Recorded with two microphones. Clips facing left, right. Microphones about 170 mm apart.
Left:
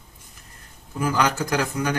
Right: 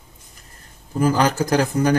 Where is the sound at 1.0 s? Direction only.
35° right (ahead or behind).